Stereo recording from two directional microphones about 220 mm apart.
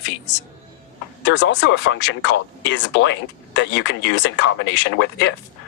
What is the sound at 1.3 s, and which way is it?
Speech, 55° left (ahead or behind).